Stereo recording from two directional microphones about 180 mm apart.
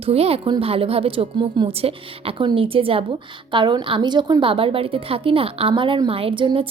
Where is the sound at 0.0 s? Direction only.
35° right (ahead or behind).